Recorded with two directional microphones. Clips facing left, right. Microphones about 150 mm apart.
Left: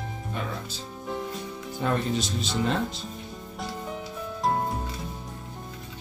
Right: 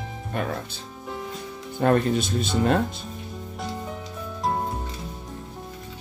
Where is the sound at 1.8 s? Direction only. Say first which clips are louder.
Right 6 dB; 55° right (ahead or behind).